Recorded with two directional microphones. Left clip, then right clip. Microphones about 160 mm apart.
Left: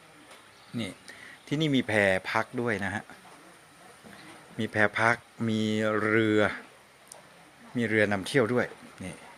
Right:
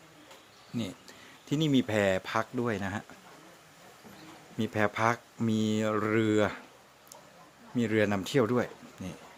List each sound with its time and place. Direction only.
0.8 s speech: 20° right (ahead or behind)
4.5 s speech: 15° right (ahead or behind)
7.8 s speech: 20° right (ahead or behind)